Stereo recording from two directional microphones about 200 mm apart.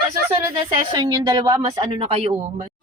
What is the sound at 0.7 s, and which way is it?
Speech, 20° right (ahead or behind).